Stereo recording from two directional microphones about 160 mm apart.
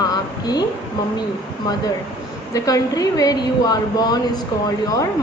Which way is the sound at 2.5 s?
20° left (ahead or behind).